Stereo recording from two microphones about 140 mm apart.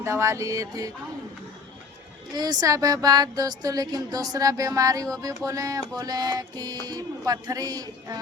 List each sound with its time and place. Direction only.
0.0 s speech: 20° right (ahead or behind)
2.3 s speech: 30° right (ahead or behind)